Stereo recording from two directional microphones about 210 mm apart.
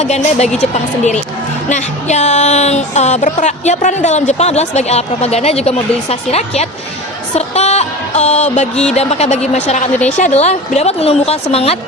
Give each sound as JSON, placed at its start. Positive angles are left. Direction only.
{"t": 0.0, "sound": "a woman's voice", "side_deg": 30}